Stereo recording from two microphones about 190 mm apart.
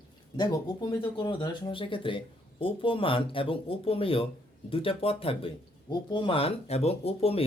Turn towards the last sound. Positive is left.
turn(degrees=30)  # may be behind; listen again after turning